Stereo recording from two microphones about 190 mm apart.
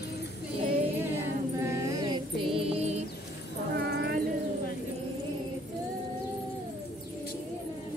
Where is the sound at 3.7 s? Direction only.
60° right (ahead or behind).